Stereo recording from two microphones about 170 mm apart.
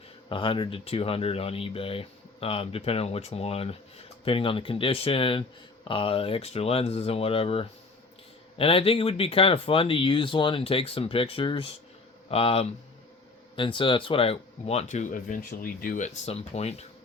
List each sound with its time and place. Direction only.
0.3 s speech: 30° left (ahead or behind)